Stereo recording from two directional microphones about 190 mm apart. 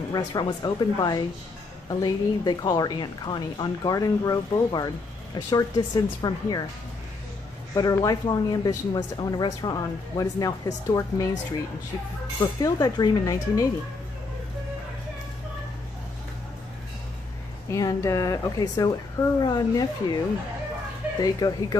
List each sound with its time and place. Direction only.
0.1 s a woman's voice: 20° left (ahead or behind)
7.7 s a woman's voice: 20° left (ahead or behind)
12.4 s a woman's voice: 20° left (ahead or behind)
17.6 s a woman's voice: 15° left (ahead or behind)
21.2 s a woman's voice: 20° left (ahead or behind)